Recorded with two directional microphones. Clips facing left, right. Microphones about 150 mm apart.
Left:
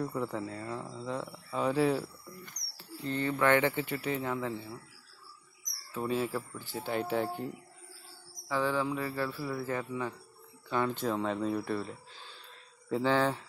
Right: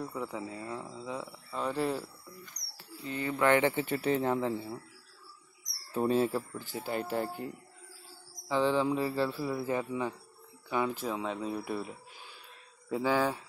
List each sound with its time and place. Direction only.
0.0 s speech: centre (ahead or behind)
3.3 s speech: 20° right (ahead or behind)
5.9 s speech: 40° right (ahead or behind)
6.2 s speech: 20° right (ahead or behind)
6.8 s speech: centre (ahead or behind)
8.5 s speech: 20° right (ahead or behind)
10.7 s speech: 5° right (ahead or behind)